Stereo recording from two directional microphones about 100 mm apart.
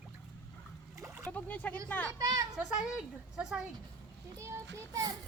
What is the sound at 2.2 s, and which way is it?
Speech, 35° right (ahead or behind).